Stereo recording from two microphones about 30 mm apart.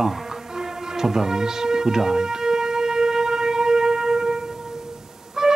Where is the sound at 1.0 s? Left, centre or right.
Centre.